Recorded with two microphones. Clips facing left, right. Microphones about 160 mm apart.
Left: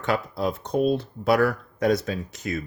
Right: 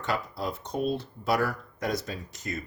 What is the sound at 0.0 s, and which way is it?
Speech, 60° left (ahead or behind).